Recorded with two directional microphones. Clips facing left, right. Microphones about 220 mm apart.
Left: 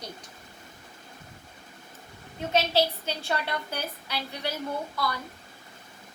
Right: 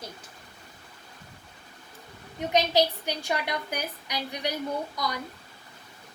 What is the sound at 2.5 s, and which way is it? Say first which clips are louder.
A woman's voice: right 1 dB; 15° right (ahead or behind).